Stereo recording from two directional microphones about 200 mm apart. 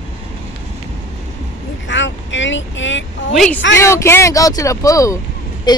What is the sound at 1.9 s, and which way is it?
Vehicle, 65° left (ahead or behind).